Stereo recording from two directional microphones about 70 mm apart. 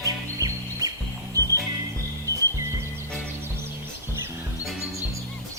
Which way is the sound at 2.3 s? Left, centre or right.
Right.